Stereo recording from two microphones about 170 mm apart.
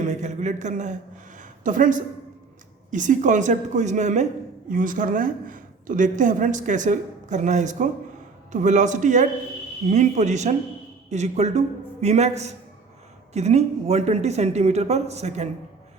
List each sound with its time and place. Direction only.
0.0 s speech: 45° right (ahead or behind)
1.4 s a sound: 50° right (ahead or behind)
2.9 s speech: 50° right (ahead or behind)